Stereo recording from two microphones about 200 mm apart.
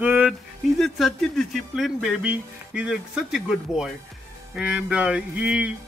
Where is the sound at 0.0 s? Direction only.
5° right (ahead or behind).